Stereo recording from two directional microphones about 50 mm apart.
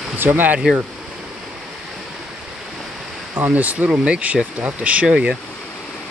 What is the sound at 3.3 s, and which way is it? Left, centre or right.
Speech, right.